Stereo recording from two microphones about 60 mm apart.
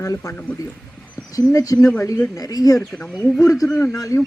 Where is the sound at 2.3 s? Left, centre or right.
Left.